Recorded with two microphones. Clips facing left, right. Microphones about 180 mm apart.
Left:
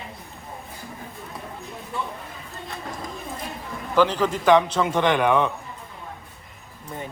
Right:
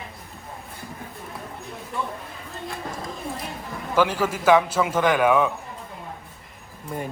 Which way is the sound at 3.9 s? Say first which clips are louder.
Left 2 dB; 10° right (ahead or behind).